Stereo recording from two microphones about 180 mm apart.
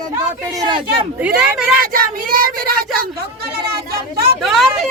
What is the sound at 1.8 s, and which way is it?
Speech, 50° right (ahead or behind).